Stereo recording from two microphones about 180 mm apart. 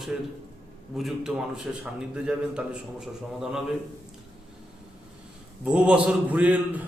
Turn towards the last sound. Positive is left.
turn(degrees=-10)  # may be behind; listen again after turning